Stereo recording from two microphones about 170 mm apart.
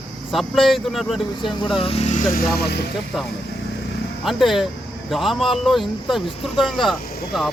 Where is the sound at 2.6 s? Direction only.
70° left (ahead or behind).